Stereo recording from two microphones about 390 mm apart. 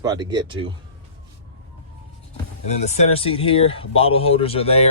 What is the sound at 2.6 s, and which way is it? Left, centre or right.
Speech, centre.